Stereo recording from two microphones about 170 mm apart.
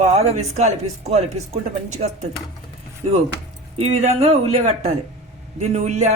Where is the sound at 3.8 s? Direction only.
40° right (ahead or behind).